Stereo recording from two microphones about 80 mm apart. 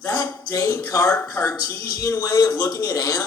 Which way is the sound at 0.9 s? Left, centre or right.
Left.